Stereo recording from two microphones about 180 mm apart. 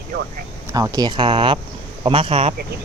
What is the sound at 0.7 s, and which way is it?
Speech, 20° right (ahead or behind).